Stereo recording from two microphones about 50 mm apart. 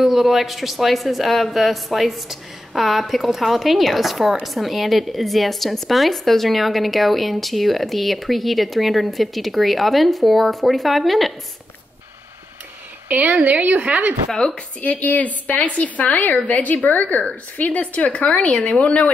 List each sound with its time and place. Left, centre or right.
0.0 s a woman's voice: centre
13.1 s a woman's voice: right
14.3 s speech: centre
14.8 s a woman's voice: left